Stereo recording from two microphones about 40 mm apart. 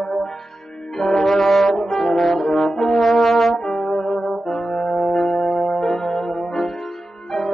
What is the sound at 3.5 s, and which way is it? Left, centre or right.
Brass instrument, centre.